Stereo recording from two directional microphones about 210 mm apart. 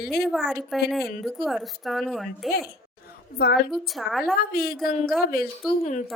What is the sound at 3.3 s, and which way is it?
Speech, 50° left (ahead or behind).